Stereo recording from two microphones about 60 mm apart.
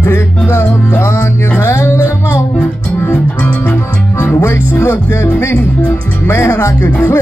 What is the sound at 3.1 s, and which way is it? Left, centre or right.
Music, left.